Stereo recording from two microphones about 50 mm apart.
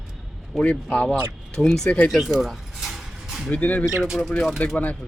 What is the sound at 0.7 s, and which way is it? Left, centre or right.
Speech, left.